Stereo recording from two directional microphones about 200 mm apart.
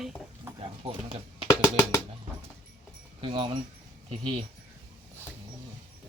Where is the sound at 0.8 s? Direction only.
30° right (ahead or behind).